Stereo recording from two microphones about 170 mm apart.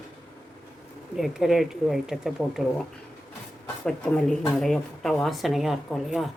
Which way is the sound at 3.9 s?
5° left (ahead or behind).